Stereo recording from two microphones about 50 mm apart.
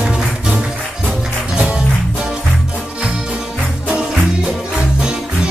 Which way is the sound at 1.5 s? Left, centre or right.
Right.